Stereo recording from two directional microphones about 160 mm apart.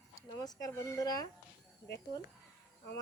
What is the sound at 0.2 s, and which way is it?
Speech, 20° left (ahead or behind).